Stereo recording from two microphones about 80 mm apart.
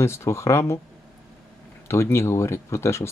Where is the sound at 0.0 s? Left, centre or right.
Left.